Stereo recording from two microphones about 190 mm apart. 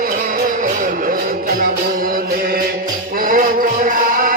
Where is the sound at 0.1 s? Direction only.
45° right (ahead or behind).